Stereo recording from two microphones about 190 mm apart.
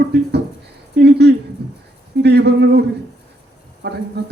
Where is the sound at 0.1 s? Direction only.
60° right (ahead or behind).